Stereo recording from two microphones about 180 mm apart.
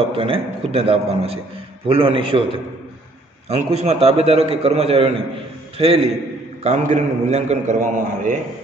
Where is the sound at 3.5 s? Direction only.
35° right (ahead or behind).